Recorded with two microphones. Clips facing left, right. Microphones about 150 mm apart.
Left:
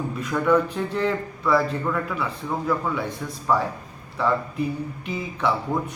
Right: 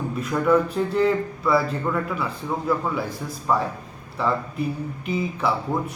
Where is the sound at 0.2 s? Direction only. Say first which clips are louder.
Right 1 dB; 5° right (ahead or behind).